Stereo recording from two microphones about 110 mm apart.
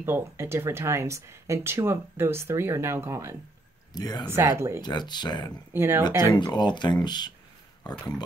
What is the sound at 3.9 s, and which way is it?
Speech, 35° left (ahead or behind).